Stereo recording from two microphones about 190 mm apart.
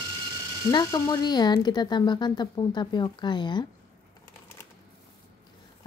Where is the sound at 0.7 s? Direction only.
20° left (ahead or behind).